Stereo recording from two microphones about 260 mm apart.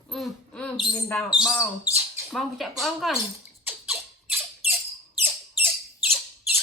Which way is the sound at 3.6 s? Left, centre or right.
Centre.